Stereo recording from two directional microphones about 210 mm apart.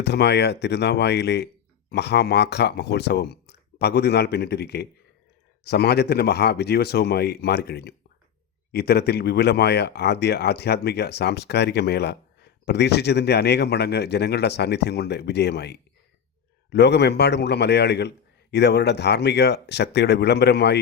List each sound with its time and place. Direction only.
0.0 s speech: 50° left (ahead or behind)